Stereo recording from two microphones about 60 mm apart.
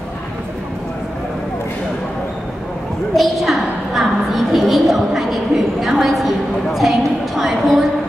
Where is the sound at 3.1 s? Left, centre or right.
Centre.